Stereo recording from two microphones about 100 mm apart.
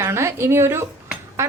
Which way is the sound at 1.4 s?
30° right (ahead or behind).